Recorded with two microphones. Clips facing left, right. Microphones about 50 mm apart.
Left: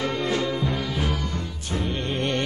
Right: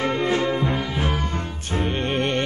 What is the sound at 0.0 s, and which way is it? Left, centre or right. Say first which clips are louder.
Music: right 3 dB; right.